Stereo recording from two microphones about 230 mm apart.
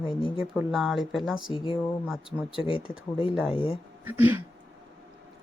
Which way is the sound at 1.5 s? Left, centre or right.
Left.